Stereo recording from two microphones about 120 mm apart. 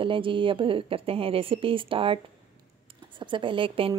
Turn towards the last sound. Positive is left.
turn(degrees=-45)  # may be behind; listen again after turning